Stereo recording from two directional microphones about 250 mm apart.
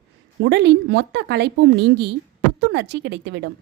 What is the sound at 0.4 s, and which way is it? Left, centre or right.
A woman's voice, right.